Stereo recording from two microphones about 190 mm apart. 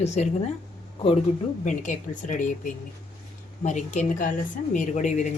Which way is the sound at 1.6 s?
40° left (ahead or behind).